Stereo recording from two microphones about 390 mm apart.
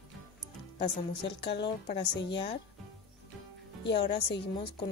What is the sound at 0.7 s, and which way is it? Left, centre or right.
A woman's voice, left.